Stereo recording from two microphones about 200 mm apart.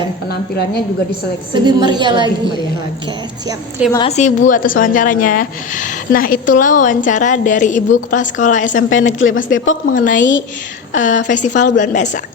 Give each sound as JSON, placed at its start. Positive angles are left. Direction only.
{"t": 0.3, "sound": "a woman's voice", "side_deg": 50}
{"t": 1.5, "sound": "a woman's voice", "side_deg": -20}
{"t": 3.9, "sound": "speech", "side_deg": 30}
{"t": 8.9, "sound": "speech", "side_deg": 75}
{"t": 9.9, "sound": "speech", "side_deg": 40}